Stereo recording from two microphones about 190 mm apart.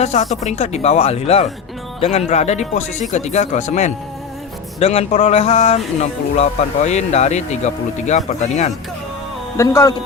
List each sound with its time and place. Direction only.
0.0 s speech: 35° left (ahead or behind)
9.6 s speech: 15° left (ahead or behind)